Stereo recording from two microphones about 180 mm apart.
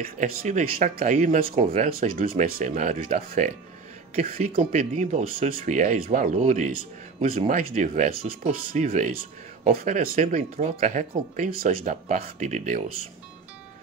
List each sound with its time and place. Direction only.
0.0 s speech: 40° right (ahead or behind)
1.5 s speech: 35° right (ahead or behind)